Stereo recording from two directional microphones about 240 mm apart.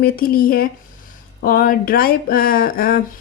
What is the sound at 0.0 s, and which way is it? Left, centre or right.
Speech, left.